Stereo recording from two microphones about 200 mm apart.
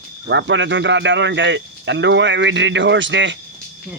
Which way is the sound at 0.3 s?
65° right (ahead or behind).